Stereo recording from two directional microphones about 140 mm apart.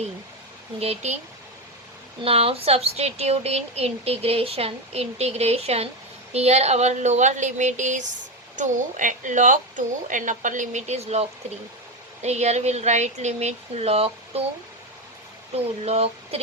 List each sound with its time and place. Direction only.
0.8 s a woman's voice: 50° right (ahead or behind)
2.2 s a woman's voice: 45° right (ahead or behind)
15.5 s a woman's voice: 50° right (ahead or behind)